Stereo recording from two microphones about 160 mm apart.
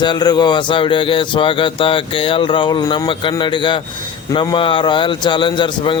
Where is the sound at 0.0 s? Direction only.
25° left (ahead or behind).